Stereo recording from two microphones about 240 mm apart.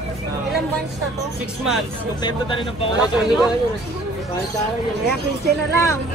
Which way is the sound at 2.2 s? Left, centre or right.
Centre.